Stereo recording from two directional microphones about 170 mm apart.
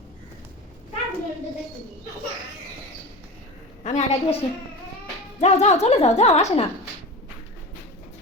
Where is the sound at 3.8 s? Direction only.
45° left (ahead or behind).